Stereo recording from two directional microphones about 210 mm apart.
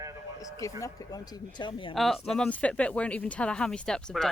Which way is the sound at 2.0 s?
Centre (ahead or behind).